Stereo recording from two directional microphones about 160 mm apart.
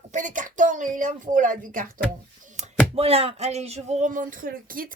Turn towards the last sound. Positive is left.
turn(degrees=-65)  # may be behind; listen again after turning